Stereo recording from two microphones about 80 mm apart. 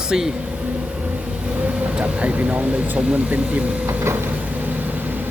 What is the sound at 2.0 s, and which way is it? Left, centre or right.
Speech, centre.